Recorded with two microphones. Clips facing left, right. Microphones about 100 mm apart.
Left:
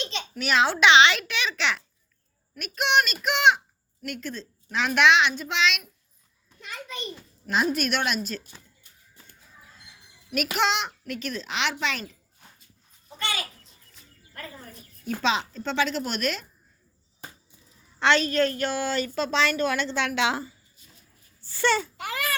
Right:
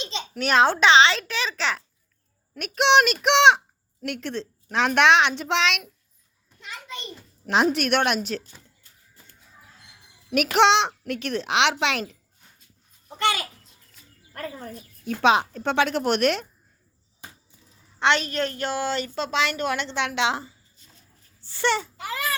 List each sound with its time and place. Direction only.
0.3 s a child's voice: 55° right (ahead or behind)
0.8 s a child's voice: 35° right (ahead or behind)
2.6 s a child's voice: 65° right (ahead or behind)
6.7 s a woman's voice: 25° right (ahead or behind)
7.4 s a child's voice: 75° right (ahead or behind)
10.3 s a child's voice: 75° right (ahead or behind)
13.1 s a sound: 65° right (ahead or behind)
14.3 s speech: 50° right (ahead or behind)
18.0 s a woman's voice: 20° right (ahead or behind)